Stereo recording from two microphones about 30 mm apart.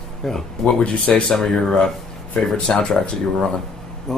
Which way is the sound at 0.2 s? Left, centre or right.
Left.